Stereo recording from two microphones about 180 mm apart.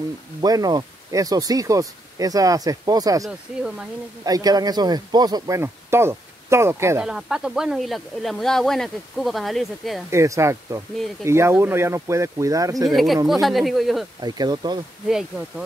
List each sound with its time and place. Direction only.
0.4 s speech: 20° right (ahead or behind)
7.1 s speech: 5° right (ahead or behind)
10.1 s speech: 15° right (ahead or behind)
12.9 s speech: centre (ahead or behind)
14.2 s speech: 20° right (ahead or behind)
15.0 s speech: 5° right (ahead or behind)